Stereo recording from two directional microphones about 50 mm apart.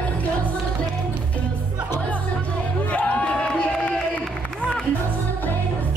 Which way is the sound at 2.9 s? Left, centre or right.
Left.